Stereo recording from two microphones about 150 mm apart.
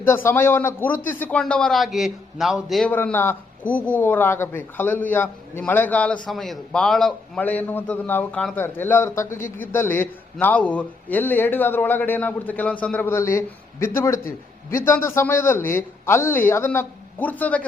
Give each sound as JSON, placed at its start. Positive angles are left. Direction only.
{"t": 0.0, "sound": "a man's voice", "side_deg": 15}
{"t": 2.9, "sound": "a man's voice", "side_deg": 15}